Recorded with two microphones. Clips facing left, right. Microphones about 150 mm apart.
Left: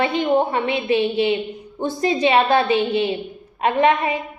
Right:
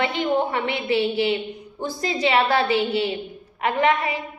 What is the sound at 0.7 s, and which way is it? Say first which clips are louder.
A woman's voice: left 3 dB; 20° left (ahead or behind).